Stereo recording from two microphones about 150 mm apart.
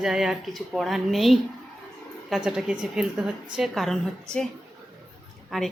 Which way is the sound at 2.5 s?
5° right (ahead or behind).